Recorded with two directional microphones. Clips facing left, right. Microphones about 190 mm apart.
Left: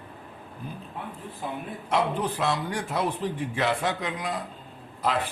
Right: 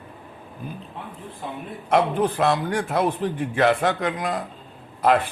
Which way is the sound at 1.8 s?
55° right (ahead or behind).